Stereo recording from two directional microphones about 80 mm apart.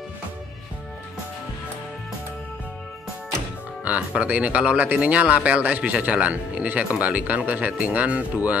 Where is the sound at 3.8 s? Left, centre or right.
Centre.